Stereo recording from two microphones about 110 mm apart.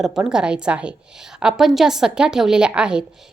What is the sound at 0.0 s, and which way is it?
A woman's voice, 5° right (ahead or behind).